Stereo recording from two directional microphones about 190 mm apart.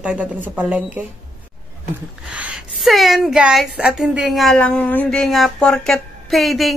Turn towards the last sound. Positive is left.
turn(degrees=0)  # may be behind; listen again after turning